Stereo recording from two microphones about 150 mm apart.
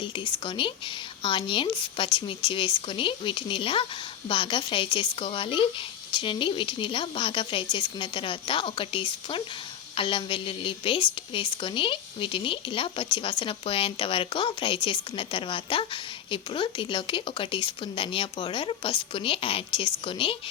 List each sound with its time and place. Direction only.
0.0 s a woman's voice: 35° left (ahead or behind)